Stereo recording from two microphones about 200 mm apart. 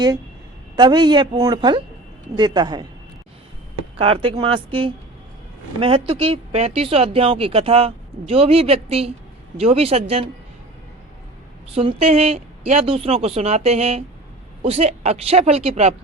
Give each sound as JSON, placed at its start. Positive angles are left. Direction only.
{"t": 0.8, "sound": "speech", "side_deg": -20}
{"t": 3.9, "sound": "speech", "side_deg": -25}
{"t": 11.7, "sound": "speech", "side_deg": -25}